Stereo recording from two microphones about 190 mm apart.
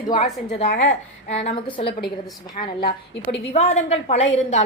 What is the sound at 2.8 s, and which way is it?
Speech, 55° left (ahead or behind).